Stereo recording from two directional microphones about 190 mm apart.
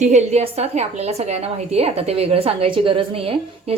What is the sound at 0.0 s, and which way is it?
A woman's voice, 35° right (ahead or behind).